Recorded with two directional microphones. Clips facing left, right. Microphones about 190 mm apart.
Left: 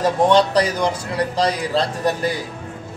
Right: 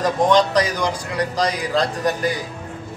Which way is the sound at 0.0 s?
30° left (ahead or behind).